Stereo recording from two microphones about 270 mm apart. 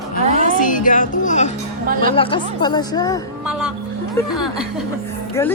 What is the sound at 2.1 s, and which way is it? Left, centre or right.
Speech, centre.